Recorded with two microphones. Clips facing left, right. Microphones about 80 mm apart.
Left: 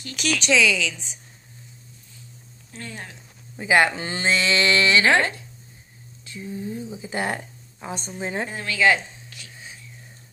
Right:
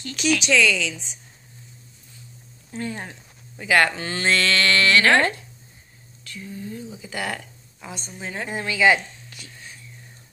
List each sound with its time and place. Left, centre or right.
0.0 s speech: centre
2.7 s speech: right
3.5 s speech: centre
8.5 s speech: centre